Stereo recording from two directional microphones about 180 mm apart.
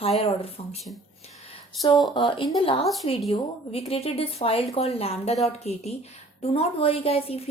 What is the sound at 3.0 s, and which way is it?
A woman's voice, 35° left (ahead or behind).